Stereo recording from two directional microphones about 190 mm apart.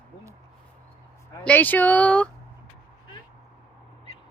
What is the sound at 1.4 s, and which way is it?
Speech, 10° left (ahead or behind).